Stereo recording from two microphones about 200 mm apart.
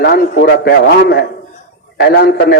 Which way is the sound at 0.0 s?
50° left (ahead or behind).